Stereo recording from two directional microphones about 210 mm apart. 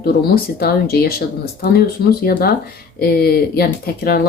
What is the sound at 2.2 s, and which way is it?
Speech, 45° left (ahead or behind).